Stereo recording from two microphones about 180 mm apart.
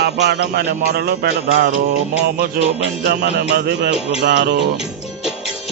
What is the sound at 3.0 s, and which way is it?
Music, 65° right (ahead or behind).